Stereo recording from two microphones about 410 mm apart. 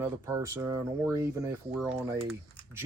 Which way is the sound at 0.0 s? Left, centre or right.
Centre.